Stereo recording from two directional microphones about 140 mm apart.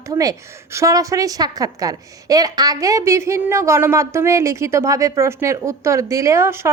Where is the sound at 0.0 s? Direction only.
25° right (ahead or behind).